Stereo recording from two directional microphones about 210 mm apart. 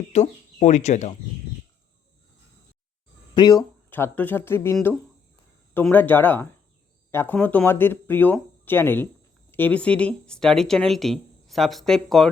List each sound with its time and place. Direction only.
0.1 s speech: 35° left (ahead or behind)
3.3 s speech: 20° left (ahead or behind); by 12.3 s centre (ahead or behind)